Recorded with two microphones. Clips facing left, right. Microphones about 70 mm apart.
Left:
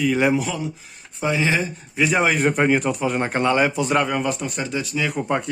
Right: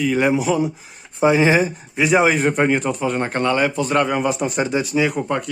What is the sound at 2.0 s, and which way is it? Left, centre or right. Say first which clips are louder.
Speech: right 3 dB; centre.